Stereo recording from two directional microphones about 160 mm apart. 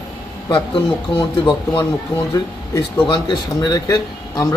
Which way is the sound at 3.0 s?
25° left (ahead or behind).